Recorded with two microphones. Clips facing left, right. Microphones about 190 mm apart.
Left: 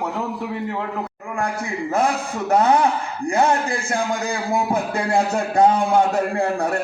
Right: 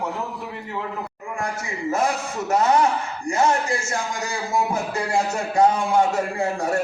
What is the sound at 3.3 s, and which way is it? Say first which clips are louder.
A man's voice: left 2 dB; 60° left (ahead or behind).